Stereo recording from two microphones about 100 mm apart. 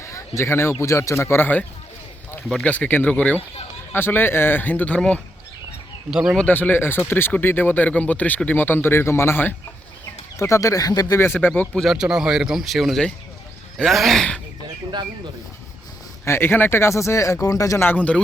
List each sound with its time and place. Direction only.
0.3 s speech: 25° left (ahead or behind)
2.6 s speech: 15° left (ahead or behind)
6.1 s speech: 5° right (ahead or behind)
6.3 s speech: 15° left (ahead or behind); by 11.2 s 40° left (ahead or behind)
11.3 s speech: 15° left (ahead or behind)
11.8 s speech: 5° right (ahead or behind)
16.2 s speech: 25° left (ahead or behind)
17.8 s speech: 15° left (ahead or behind)